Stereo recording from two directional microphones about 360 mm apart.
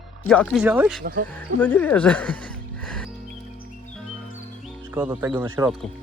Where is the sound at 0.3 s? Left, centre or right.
Centre.